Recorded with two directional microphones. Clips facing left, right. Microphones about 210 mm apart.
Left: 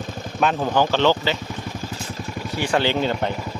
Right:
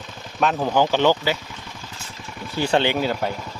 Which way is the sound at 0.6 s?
15° right (ahead or behind).